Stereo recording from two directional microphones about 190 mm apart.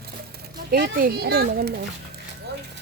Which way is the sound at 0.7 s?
55° right (ahead or behind).